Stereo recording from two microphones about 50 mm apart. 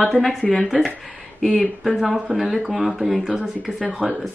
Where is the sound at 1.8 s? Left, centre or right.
Centre.